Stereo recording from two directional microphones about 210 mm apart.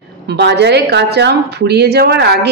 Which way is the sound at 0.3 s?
55° right (ahead or behind).